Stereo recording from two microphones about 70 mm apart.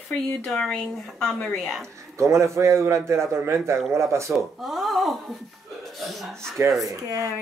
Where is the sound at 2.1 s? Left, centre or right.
Right.